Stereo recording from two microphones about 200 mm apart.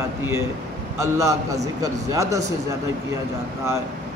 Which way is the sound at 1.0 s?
15° right (ahead or behind).